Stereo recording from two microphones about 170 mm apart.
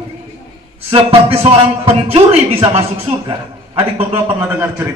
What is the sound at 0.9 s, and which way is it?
A man's voice, 35° right (ahead or behind).